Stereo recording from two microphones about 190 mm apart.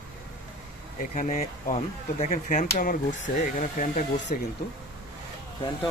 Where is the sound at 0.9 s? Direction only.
40° left (ahead or behind).